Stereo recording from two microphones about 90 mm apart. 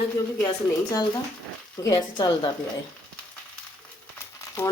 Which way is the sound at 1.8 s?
50° left (ahead or behind).